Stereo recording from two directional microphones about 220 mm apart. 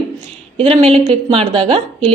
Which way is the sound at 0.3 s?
25° right (ahead or behind).